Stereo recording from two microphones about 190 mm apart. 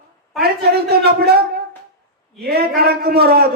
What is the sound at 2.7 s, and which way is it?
Speech, 55° right (ahead or behind).